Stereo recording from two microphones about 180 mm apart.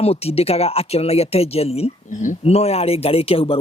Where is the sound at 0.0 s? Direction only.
35° left (ahead or behind).